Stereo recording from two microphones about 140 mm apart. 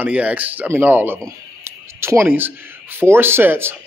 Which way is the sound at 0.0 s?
10° right (ahead or behind).